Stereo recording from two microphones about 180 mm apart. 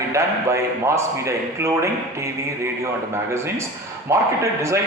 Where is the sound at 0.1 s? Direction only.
15° right (ahead or behind).